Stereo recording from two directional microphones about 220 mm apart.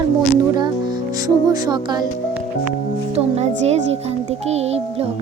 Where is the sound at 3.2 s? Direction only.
30° right (ahead or behind).